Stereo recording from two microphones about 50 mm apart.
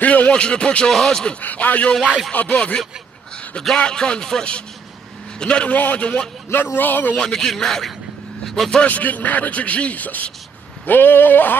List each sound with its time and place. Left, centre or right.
0.0 s speech: left
0.9 s speech: centre
1.4 s a man's voice: left; by 5.7 s centre
5.7 s speech: left
6.5 s speech: left
7.2 s speech: centre
8.8 s speech: left